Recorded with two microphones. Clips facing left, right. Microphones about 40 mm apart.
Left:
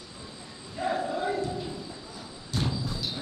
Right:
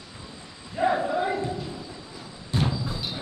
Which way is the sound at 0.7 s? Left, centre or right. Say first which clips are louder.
Right 5 dB; right.